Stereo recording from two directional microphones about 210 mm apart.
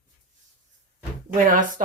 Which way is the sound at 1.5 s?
40° right (ahead or behind).